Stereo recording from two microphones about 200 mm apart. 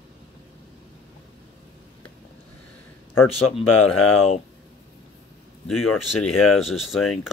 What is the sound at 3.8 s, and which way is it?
Speech, 90° left.